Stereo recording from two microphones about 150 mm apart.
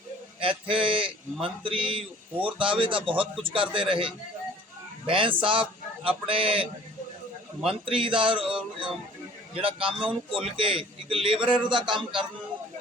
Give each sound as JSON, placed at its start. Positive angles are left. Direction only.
{"t": 0.3, "sound": "a man's voice", "side_deg": -35}
{"t": 7.9, "sound": "a man's voice", "side_deg": -35}
{"t": 9.6, "sound": "a man's voice", "side_deg": -35}